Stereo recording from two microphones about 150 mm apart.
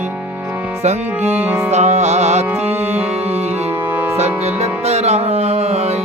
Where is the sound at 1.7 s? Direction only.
50° right (ahead or behind).